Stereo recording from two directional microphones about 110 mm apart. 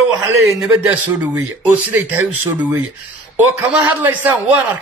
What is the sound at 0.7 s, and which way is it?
Speech, 15° right (ahead or behind).